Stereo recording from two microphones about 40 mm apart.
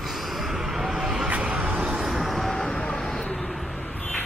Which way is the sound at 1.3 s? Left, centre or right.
Right.